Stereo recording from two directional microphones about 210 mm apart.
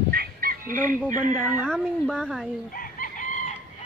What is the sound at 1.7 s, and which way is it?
Speech, 5° left (ahead or behind).